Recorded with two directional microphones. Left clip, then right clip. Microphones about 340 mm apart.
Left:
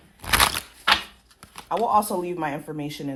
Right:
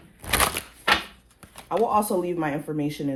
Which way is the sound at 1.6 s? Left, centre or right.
Left.